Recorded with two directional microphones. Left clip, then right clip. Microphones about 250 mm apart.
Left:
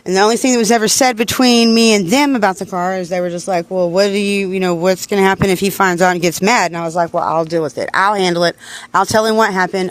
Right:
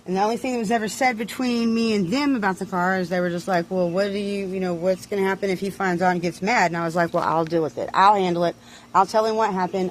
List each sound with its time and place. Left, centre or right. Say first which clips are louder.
0.1 s speech: left 10 dB; left
2.7 s speech: left 5 dB; left
3.9 s speech: left 10 dB; left
6.9 s speech: left 6 dB; centre
7.3 s speech: left 6 dB; centre; by 9.8 s left